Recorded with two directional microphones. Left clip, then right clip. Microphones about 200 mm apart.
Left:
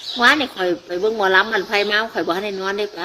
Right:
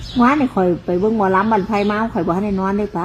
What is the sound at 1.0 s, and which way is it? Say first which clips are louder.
Speech: even; 20° left (ahead or behind).